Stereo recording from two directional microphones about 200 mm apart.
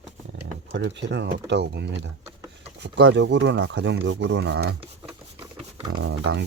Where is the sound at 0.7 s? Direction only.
60° right (ahead or behind).